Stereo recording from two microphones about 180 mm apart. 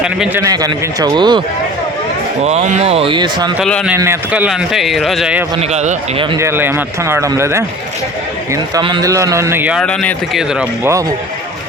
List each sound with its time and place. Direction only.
0.0 s a man's voice: 5° right (ahead or behind)
0.4 s speech: 20° right (ahead or behind)
2.4 s speech: 40° right (ahead or behind)
3.6 s a man's voice: 5° left (ahead or behind)
3.8 s a man's voice: 15° right (ahead or behind)
5.5 s speech: 40° right (ahead or behind)
6.4 s speech: 10° right (ahead or behind)
8.7 s speech: 25° right (ahead or behind)
9.8 s a man's voice: 5° left (ahead or behind)